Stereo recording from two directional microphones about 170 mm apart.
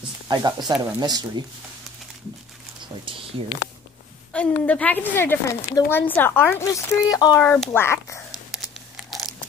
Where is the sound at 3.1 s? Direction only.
30° right (ahead or behind).